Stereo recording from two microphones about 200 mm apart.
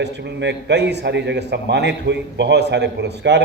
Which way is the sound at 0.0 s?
60° right (ahead or behind).